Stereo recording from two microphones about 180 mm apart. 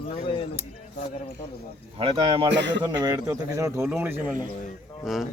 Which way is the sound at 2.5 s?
80° right.